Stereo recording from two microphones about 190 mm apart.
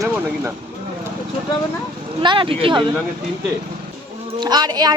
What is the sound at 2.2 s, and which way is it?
Speech, 25° right (ahead or behind).